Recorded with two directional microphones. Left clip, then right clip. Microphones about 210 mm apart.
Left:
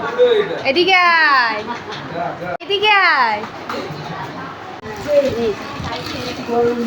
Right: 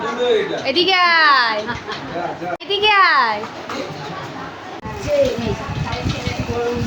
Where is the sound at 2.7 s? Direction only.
Centre (ahead or behind).